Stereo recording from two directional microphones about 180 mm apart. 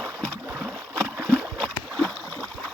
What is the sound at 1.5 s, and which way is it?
Boat, 5° left (ahead or behind).